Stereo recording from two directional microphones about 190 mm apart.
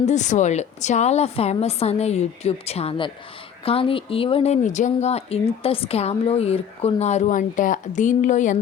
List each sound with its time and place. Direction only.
0.0 s speech: 40° left (ahead or behind)